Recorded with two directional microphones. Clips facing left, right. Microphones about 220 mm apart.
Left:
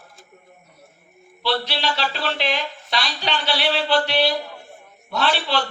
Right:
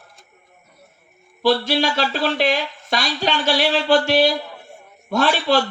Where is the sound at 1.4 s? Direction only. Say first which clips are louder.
Right 6 dB; 45° right (ahead or behind).